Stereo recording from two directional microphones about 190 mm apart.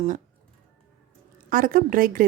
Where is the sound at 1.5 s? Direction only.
45° right (ahead or behind).